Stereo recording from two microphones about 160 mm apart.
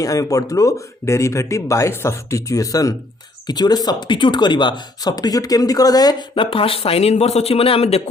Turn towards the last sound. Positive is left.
turn(degrees=35)  # may be behind; listen again after turning